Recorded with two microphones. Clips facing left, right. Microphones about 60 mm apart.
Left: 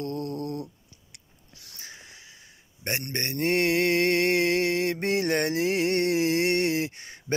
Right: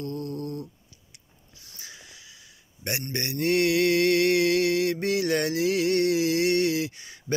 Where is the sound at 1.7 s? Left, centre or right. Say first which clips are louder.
Left 1 dB; left.